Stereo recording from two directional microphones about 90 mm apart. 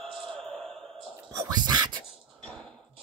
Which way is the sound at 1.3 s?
45° right (ahead or behind).